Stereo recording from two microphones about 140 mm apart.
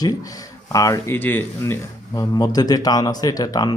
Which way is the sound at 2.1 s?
25° left (ahead or behind).